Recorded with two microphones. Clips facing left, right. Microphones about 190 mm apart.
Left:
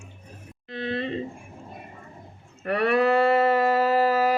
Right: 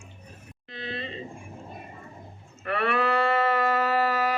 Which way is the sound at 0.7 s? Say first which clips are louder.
Left 8 dB; 55° left (ahead or behind).